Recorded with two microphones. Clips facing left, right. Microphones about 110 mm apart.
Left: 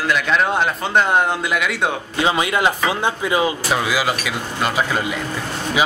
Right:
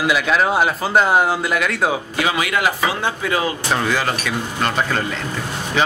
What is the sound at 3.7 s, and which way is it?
Speech, 5° left (ahead or behind).